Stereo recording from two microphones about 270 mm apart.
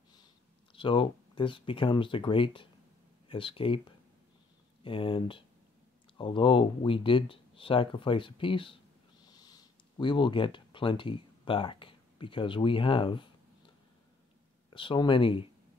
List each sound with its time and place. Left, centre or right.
0.7 s speech: centre
4.8 s speech: centre
14.7 s speech: centre